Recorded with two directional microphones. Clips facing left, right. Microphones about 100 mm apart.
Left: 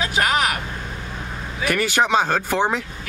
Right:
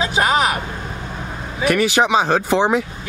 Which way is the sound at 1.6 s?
5° right (ahead or behind).